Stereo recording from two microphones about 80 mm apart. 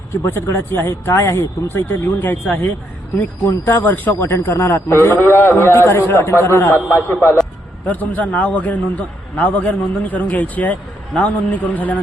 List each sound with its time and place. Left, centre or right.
0.3 s a man's voice: left
3.7 s a man's voice: left